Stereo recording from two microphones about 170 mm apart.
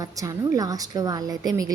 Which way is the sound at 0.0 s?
20° right (ahead or behind).